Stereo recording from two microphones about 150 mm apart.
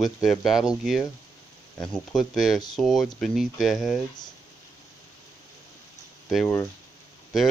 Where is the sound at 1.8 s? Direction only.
5° left (ahead or behind).